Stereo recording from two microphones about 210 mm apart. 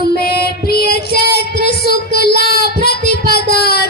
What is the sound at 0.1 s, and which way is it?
Child singing, 50° left (ahead or behind).